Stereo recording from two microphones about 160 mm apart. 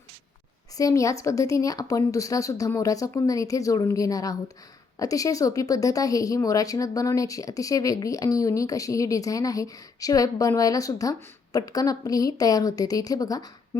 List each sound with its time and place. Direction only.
0.8 s speech: 20° left (ahead or behind)